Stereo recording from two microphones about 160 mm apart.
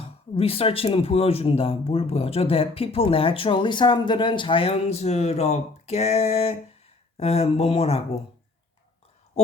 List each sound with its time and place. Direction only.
0.0 s speech: 35° left (ahead or behind)